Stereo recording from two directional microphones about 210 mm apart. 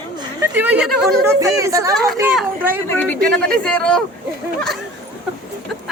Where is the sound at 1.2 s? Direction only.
15° right (ahead or behind).